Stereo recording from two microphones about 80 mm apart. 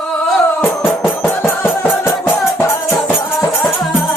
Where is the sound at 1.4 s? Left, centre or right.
Left.